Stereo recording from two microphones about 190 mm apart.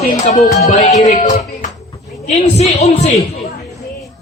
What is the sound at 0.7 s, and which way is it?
Music, 35° left (ahead or behind).